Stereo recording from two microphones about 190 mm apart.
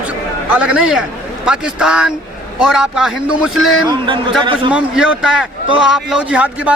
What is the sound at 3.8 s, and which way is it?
Speech, 25° right (ahead or behind).